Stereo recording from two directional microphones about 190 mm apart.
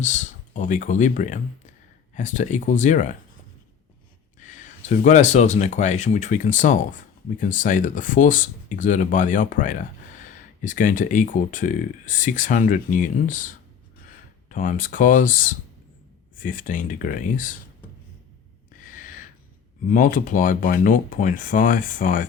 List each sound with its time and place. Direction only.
0.0 s speech: 40° left (ahead or behind)
4.4 s speech: 40° left (ahead or behind)
14.5 s speech: 45° left (ahead or behind)
19.9 s speech: 45° left (ahead or behind)